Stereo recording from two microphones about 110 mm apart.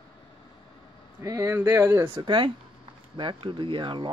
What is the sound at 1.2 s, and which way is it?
Speech, 25° right (ahead or behind).